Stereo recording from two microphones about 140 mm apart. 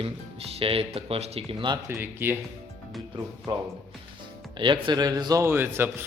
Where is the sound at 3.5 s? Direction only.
35° right (ahead or behind).